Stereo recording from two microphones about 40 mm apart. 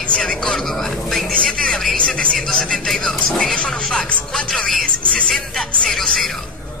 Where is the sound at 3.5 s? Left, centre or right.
Left.